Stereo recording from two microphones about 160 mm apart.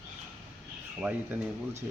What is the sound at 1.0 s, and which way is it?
Speech, 10° right (ahead or behind).